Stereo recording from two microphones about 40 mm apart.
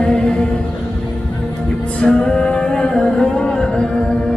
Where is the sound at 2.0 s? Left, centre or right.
Left.